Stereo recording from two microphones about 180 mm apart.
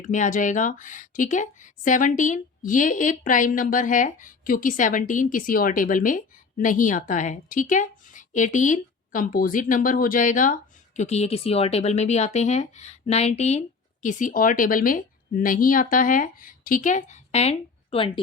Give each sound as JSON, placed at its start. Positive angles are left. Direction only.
{"t": 0.0, "sound": "speech", "side_deg": 45}